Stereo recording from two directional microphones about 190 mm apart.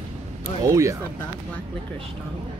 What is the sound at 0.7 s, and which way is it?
Speech, 15° right (ahead or behind).